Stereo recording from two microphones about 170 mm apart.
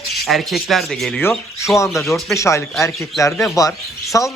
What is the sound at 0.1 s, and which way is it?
Speech, centre (ahead or behind).